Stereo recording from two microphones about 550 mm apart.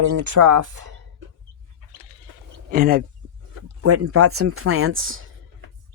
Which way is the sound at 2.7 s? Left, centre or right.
Centre.